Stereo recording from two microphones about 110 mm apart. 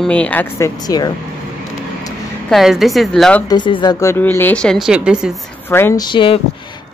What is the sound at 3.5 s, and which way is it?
Speech, 45° left (ahead or behind).